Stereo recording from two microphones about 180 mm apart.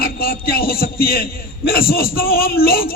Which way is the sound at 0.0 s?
55° left (ahead or behind).